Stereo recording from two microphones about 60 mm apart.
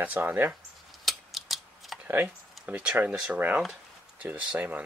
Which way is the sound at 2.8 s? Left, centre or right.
Right.